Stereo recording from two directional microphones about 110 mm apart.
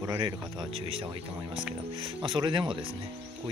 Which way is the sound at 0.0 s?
40° right (ahead or behind).